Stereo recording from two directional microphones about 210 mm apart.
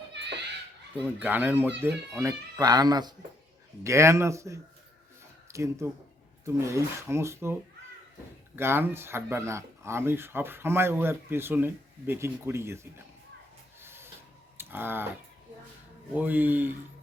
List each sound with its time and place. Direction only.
0.1 s children playing: 55° right (ahead or behind)
1.0 s speech: 10° right (ahead or behind)
8.5 s speech: 10° right (ahead or behind)
13.8 s printer: 10° right (ahead or behind)
14.6 s speech: 10° right (ahead or behind)
16.1 s speech: 10° right (ahead or behind)